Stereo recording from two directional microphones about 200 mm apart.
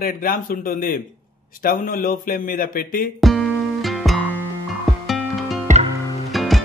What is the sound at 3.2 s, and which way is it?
Music, centre (ahead or behind).